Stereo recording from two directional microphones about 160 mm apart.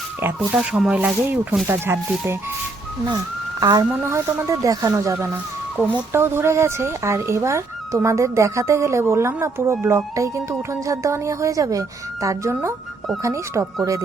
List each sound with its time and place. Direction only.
0.3 s speech: 5° right (ahead or behind)
3.6 s speech: 25° right (ahead or behind)